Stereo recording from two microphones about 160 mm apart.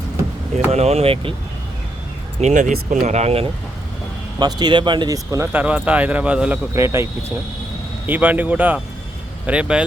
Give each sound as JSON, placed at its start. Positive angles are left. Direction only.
{"t": 0.7, "sound": "speech", "side_deg": -40}
{"t": 2.4, "sound": "speech", "side_deg": -50}
{"t": 4.4, "sound": "speech", "side_deg": -25}
{"t": 5.5, "sound": "speech", "side_deg": -10}